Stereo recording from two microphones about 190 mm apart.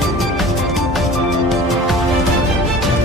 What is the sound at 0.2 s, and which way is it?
Music, centre (ahead or behind).